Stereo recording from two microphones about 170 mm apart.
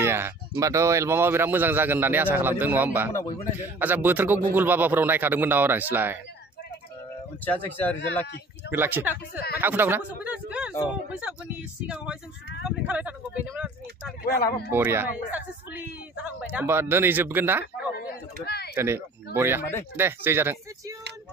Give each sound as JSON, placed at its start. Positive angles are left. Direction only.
{"t": 0.0, "sound": "a sound", "side_deg": -15}
{"t": 0.6, "sound": "speech", "side_deg": -15}
{"t": 7.4, "sound": "speech", "side_deg": 10}
{"t": 8.7, "sound": "a man's voice", "side_deg": -10}
{"t": 11.9, "sound": "speech", "side_deg": -5}
{"t": 14.2, "sound": "speech", "side_deg": 70}
{"t": 14.7, "sound": "speech", "side_deg": -15}
{"t": 17.9, "sound": "speech", "side_deg": 70}
{"t": 18.8, "sound": "speech", "side_deg": -15}